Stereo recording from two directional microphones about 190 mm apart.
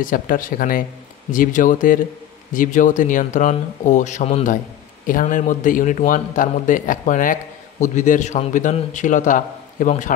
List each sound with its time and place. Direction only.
0.0 s a man's voice: 45° left (ahead or behind)